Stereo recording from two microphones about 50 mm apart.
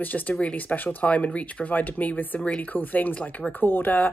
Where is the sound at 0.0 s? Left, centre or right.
Left.